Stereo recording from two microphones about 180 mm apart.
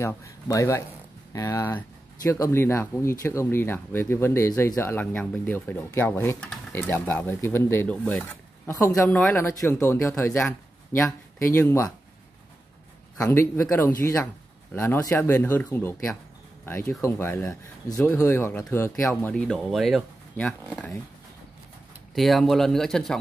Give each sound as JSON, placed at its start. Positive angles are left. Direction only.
{"t": 0.0, "sound": "speech", "side_deg": 15}
{"t": 13.2, "sound": "speech", "side_deg": 15}
{"t": 22.1, "sound": "speech", "side_deg": 0}